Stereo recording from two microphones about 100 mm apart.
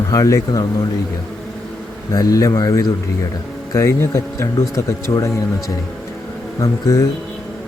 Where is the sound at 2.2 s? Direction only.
35° left (ahead or behind).